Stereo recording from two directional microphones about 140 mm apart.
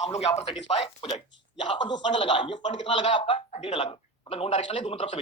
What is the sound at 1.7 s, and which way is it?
Speech, 35° left (ahead or behind).